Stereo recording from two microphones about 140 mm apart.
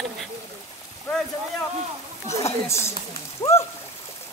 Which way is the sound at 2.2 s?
20° left (ahead or behind).